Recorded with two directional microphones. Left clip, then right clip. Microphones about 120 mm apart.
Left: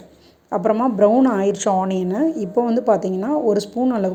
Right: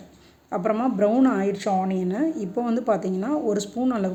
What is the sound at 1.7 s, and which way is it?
Speech, 20° left (ahead or behind).